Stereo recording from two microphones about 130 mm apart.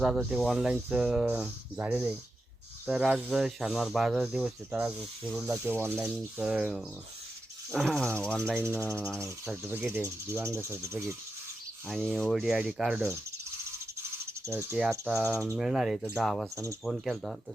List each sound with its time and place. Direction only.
0.0 s speech: 5° right (ahead or behind)
5.5 s speech: 20° right (ahead or behind)
6.1 s speech: 5° right (ahead or behind)
7.7 s speech: 5° left (ahead or behind)
8.5 s speech: 15° right (ahead or behind)
8.8 s cricket: 15° left (ahead or behind)
9.6 s speech: 15° right (ahead or behind)
12.1 s speech: centre (ahead or behind)
14.4 s speech: 20° right (ahead or behind); by 17.3 s centre (ahead or behind)